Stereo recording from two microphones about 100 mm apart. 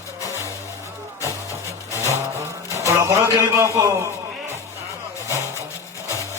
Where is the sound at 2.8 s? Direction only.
30° right (ahead or behind).